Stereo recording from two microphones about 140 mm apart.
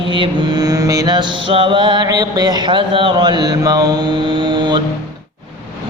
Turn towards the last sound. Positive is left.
turn(degrees=-30)  # may be behind; listen again after turning